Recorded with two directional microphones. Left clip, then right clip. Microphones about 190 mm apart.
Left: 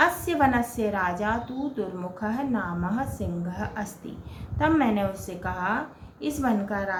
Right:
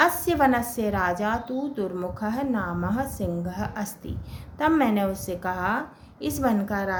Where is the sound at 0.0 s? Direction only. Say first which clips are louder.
Right 1 dB; 50° right (ahead or behind).